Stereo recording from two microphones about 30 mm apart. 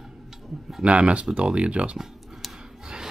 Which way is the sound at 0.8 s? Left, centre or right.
Right.